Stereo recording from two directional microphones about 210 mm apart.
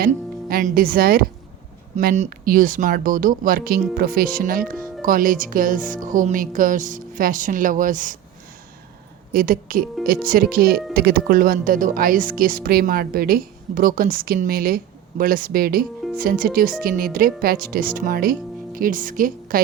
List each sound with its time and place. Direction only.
0.0 s speech: 45° right (ahead or behind)
9.3 s speech: 40° right (ahead or behind)